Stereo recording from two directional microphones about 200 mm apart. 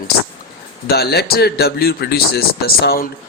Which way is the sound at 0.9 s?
55° left (ahead or behind).